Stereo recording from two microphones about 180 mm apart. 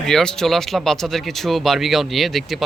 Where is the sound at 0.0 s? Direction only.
5° left (ahead or behind).